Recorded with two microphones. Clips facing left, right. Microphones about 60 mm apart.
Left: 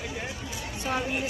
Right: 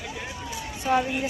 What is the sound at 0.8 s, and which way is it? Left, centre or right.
Speech, centre.